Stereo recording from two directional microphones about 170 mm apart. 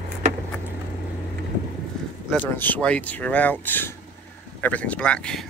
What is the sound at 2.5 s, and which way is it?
Speech, 10° left (ahead or behind).